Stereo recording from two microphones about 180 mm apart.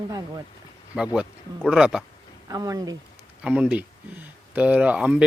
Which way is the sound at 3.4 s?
5° right (ahead or behind).